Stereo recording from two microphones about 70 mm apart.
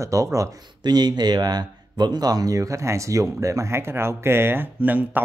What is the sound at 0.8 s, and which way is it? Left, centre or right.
Speech, right.